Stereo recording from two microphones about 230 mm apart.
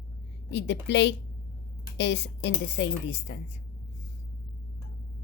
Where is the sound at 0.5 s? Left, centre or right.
Left.